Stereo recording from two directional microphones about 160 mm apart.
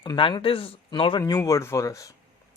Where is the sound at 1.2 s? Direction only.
20° left (ahead or behind).